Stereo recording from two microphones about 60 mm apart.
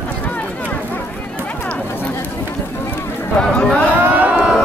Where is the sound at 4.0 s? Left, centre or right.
Right.